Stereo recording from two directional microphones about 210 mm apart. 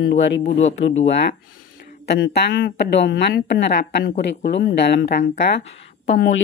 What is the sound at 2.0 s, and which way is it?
A woman's voice, 50° left (ahead or behind).